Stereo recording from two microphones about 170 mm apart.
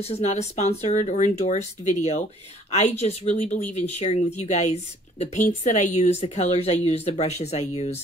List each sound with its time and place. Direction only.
0.0 s speech: 40° left (ahead or behind)